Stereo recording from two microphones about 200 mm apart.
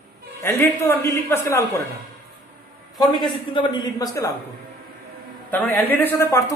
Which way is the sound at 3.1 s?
20° left (ahead or behind).